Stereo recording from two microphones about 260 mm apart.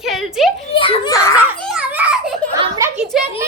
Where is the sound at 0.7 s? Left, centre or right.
Centre.